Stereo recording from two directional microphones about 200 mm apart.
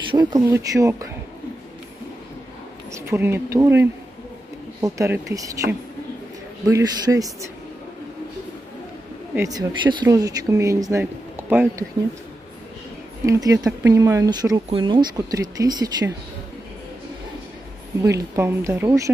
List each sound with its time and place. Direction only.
0.1 s speech: 20° right (ahead or behind)
2.9 s speech: 10° right (ahead or behind)
9.3 s speech: 15° right (ahead or behind)
13.2 s speech: 15° right (ahead or behind)
18.0 s speech: 15° right (ahead or behind)